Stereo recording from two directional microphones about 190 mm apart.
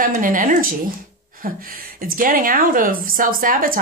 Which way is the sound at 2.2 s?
45° right (ahead or behind).